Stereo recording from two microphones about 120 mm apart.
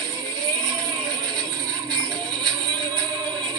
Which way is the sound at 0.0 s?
35° right (ahead or behind).